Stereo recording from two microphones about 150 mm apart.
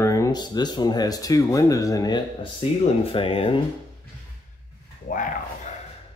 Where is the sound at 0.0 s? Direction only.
25° left (ahead or behind).